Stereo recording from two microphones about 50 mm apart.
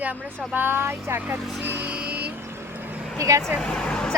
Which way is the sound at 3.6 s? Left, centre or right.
Centre.